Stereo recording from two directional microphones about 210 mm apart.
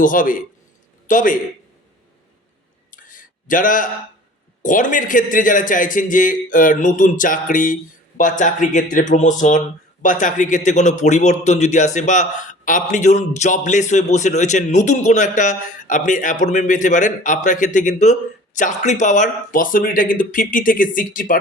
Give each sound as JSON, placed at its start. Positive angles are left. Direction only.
{"t": 0.0, "sound": "speech", "side_deg": 40}
{"t": 2.9, "sound": "a sound", "side_deg": 40}
{"t": 4.6, "sound": "speech", "side_deg": 40}